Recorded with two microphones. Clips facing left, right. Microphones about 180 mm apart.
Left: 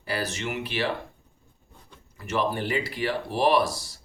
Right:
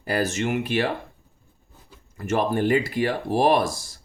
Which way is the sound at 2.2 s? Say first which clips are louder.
Right 5 dB; 45° right (ahead or behind).